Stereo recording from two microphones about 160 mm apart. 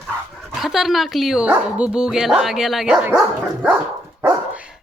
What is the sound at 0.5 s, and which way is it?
Speech, centre (ahead or behind).